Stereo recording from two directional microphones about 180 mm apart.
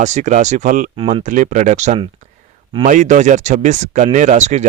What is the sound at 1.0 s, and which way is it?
Speech, 30° right (ahead or behind).